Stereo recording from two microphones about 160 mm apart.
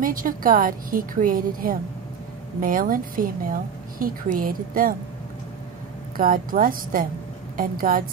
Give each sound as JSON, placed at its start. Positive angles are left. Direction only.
{"t": 0.0, "sound": "a woman's voice", "side_deg": -60}
{"t": 6.1, "sound": "a woman's voice", "side_deg": -60}